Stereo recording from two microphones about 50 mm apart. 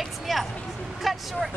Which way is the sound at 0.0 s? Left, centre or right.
Centre.